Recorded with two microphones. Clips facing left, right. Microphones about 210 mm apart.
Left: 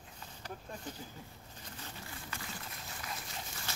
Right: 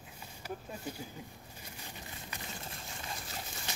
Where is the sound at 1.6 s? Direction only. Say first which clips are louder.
Left 1 dB; 15° right (ahead or behind).